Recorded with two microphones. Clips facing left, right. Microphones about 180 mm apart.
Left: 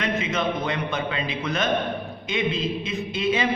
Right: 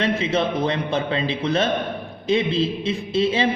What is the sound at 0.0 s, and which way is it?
A man's voice, 30° right (ahead or behind).